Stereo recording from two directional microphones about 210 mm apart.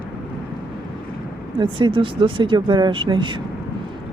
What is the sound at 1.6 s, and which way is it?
Speech, 25° right (ahead or behind).